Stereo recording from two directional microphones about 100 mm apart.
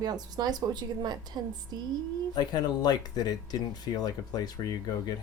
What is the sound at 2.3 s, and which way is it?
Speech, 45° left (ahead or behind).